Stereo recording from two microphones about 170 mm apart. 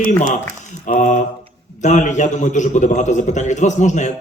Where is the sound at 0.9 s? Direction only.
50° left (ahead or behind).